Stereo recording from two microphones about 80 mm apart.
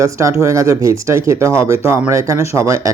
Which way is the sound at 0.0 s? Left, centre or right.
Right.